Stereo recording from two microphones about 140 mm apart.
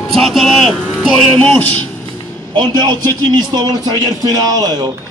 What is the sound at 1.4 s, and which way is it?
Speech, 10° left (ahead or behind).